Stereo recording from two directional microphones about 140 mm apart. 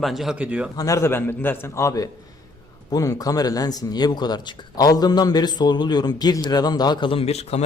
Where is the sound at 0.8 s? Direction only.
25° left (ahead or behind).